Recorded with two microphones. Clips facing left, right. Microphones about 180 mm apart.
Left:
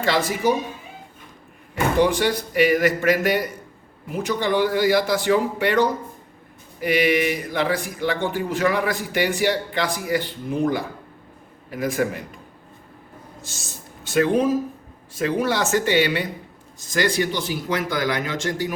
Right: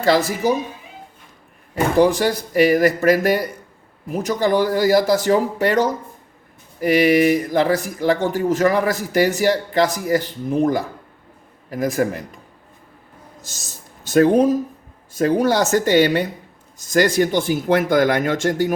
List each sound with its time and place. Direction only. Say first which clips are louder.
0.0 s speech: right 4 dB; 40° right (ahead or behind)
1.7 s speech: right 4 dB; 40° right (ahead or behind)
13.5 s speech: left 2 dB; 40° right (ahead or behind)